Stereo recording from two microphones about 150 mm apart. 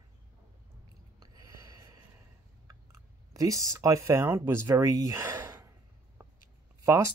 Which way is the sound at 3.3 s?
20° right (ahead or behind).